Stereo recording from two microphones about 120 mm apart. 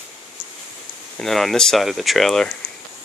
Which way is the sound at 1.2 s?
Centre (ahead or behind).